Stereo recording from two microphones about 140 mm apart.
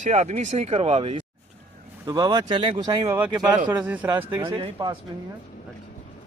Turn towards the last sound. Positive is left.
turn(degrees=-35)  # may be behind; listen again after turning